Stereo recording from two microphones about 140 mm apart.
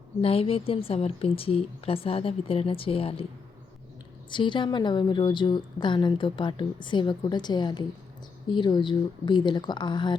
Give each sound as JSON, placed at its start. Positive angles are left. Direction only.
{"t": 0.2, "sound": "a woman's voice", "side_deg": 45}
{"t": 4.3, "sound": "a woman's voice", "side_deg": 35}